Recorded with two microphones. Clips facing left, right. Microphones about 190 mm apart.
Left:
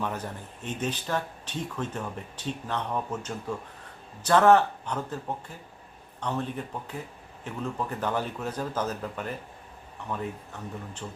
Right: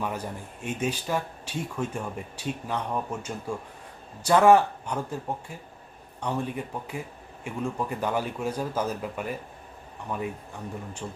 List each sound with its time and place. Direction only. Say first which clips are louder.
0.0 s speech: right 1 dB; 10° right (ahead or behind)